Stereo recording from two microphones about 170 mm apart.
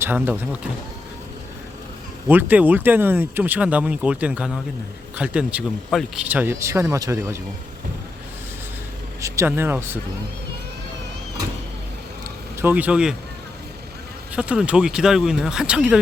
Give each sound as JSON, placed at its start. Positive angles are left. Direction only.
{"t": 0.0, "sound": "speech", "side_deg": -10}
{"t": 2.2, "sound": "speech", "side_deg": -10}
{"t": 9.2, "sound": "speech", "side_deg": -15}
{"t": 12.6, "sound": "speech", "side_deg": -10}
{"t": 14.3, "sound": "speech", "side_deg": -5}